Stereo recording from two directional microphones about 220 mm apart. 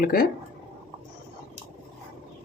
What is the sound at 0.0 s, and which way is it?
Speech, 45° left (ahead or behind).